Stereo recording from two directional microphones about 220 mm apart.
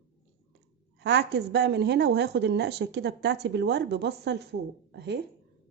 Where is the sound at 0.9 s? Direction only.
50° right (ahead or behind).